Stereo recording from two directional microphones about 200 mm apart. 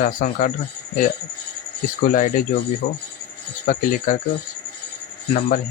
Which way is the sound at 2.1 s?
40° left (ahead or behind).